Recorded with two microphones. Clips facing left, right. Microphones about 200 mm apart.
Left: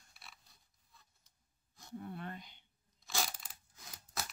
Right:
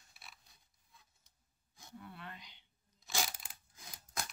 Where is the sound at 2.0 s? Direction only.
45° left (ahead or behind).